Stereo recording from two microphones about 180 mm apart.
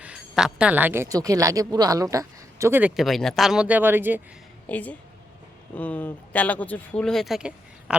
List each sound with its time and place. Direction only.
0.0 s speech: 5° right (ahead or behind)
2.9 s speech: centre (ahead or behind)
4.6 s speech: 10° left (ahead or behind)